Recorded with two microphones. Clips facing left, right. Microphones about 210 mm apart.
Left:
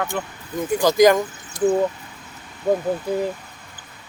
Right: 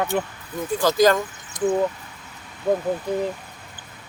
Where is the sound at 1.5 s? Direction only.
20° right (ahead or behind).